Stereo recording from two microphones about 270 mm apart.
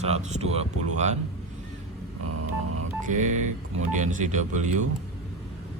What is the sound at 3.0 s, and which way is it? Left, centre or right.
Speech, right.